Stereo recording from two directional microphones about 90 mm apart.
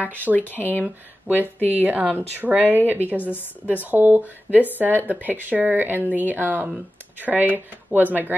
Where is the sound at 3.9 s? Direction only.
20° right (ahead or behind).